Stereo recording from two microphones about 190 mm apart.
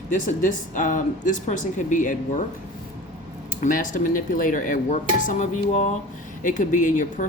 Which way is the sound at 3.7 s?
45° left (ahead or behind).